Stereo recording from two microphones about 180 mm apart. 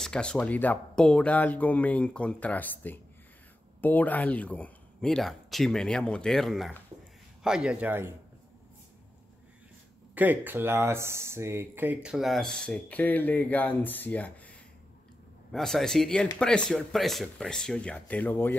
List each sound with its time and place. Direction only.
0.0 s speech: 5° left (ahead or behind)
10.1 s speech: 10° right (ahead or behind); by 18.6 s 10° left (ahead or behind)